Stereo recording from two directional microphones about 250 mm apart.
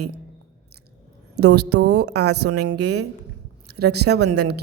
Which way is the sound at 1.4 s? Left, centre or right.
Right.